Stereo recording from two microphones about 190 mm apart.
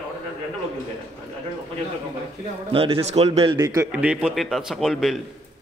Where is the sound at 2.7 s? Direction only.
30° right (ahead or behind).